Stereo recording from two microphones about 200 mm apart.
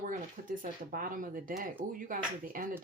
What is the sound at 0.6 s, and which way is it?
Speech, 45° right (ahead or behind).